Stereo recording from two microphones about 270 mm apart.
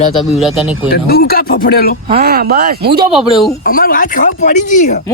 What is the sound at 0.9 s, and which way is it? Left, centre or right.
Speech, left.